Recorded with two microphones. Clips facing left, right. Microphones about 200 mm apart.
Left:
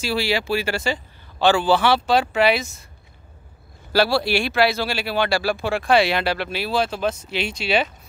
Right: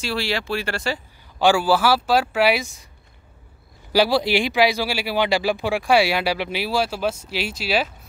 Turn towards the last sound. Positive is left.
turn(degrees=-5)  # may be behind; listen again after turning